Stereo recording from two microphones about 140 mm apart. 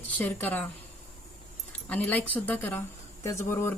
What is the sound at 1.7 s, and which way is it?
Speech, 10° left (ahead or behind).